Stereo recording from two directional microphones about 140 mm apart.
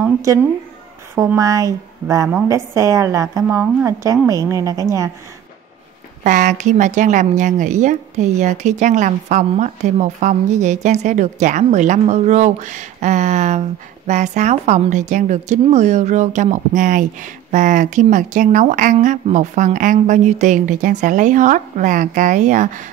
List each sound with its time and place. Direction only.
0.0 s a sound: 15° right (ahead or behind)
1.1 s a woman's voice: 20° right (ahead or behind)
6.2 s a woman's voice: 65° right (ahead or behind)